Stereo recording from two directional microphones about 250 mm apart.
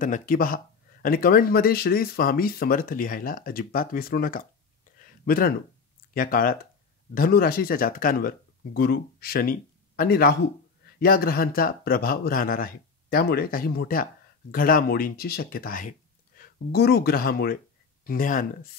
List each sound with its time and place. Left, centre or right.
0.0 s speech: left
4.9 s a sound: left
6.1 s speech: left